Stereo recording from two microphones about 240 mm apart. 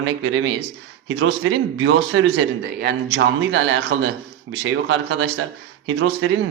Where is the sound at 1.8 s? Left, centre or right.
Right.